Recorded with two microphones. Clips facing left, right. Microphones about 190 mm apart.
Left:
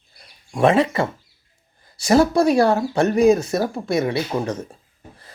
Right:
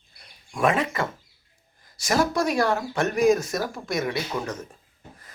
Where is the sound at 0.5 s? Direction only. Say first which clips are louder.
Left 7 dB; 30° left (ahead or behind).